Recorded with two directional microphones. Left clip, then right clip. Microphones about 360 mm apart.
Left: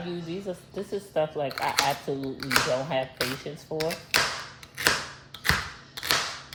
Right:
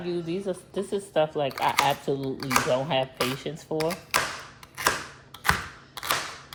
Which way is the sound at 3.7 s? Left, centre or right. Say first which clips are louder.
Right 2 dB; right.